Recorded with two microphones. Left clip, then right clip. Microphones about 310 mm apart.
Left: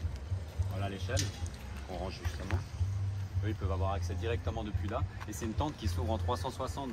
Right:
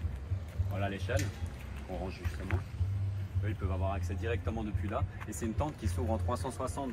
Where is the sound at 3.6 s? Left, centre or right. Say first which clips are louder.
Left 1 dB; left.